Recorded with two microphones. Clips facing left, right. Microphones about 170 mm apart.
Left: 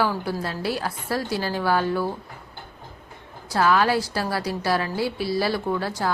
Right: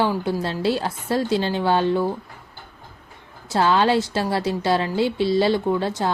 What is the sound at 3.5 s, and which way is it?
A woman's voice, 25° right (ahead or behind).